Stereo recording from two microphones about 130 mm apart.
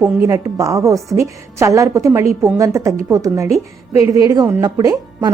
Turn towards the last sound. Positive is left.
turn(degrees=-30)  # may be behind; listen again after turning